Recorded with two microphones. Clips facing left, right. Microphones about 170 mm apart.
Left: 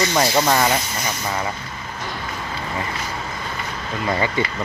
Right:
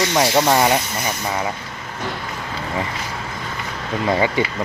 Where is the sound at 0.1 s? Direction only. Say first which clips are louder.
Right 2 dB; 15° right (ahead or behind).